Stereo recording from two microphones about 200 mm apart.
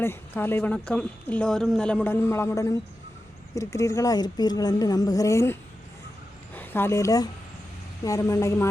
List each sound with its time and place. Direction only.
0.0 s speech: 10° left (ahead or behind)